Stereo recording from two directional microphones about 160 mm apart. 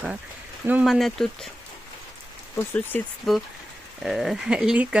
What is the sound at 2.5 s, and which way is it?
Speech, 15° left (ahead or behind).